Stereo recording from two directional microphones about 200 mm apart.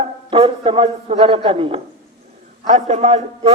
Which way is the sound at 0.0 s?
25° right (ahead or behind).